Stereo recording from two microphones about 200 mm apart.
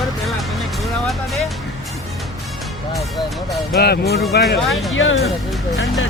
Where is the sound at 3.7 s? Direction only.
50° left (ahead or behind).